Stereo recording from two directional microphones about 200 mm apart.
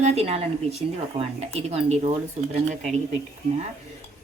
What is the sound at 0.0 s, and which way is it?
A woman's voice, 30° right (ahead or behind).